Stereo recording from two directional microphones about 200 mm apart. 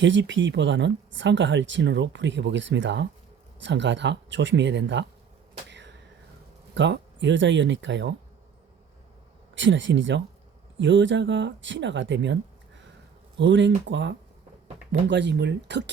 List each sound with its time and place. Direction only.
0.0 s speech: 65° right (ahead or behind)
5.7 s a sound: 60° right (ahead or behind)
6.7 s speech: 65° right (ahead or behind)
9.6 s speech: 65° right (ahead or behind)
13.4 s speech: 65° right (ahead or behind)